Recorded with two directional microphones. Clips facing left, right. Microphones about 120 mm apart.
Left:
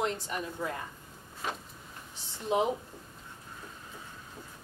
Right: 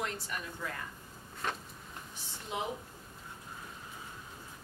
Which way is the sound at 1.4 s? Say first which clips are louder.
Left 1 dB; 5° left (ahead or behind).